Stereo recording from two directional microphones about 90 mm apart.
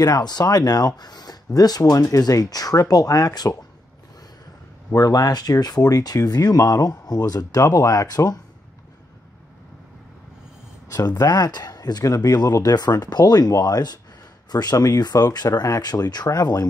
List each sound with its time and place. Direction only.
0.0 s speech: 50° left (ahead or behind)
4.9 s speech: 45° left (ahead or behind)
10.9 s speech: 40° left (ahead or behind)